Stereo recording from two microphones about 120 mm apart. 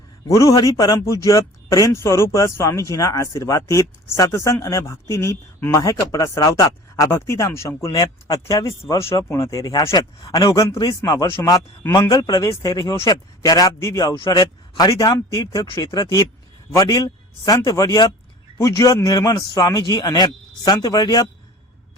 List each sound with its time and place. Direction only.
0.3 s speech: 30° left (ahead or behind)